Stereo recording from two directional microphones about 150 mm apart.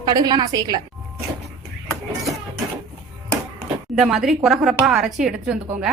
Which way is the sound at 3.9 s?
Centre (ahead or behind).